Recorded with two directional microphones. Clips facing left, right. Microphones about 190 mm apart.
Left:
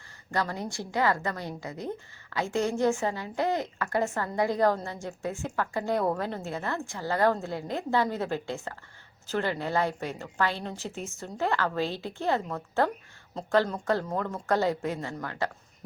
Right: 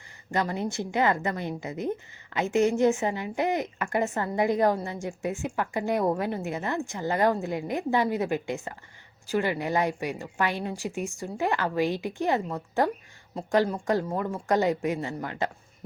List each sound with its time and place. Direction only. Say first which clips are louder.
0.3 s a woman's voice: right 3 dB; 20° right (ahead or behind)